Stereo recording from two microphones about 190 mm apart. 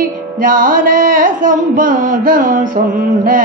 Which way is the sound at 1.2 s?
45° right (ahead or behind).